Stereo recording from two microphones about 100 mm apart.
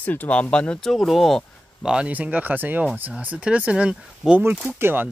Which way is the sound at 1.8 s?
10° right (ahead or behind).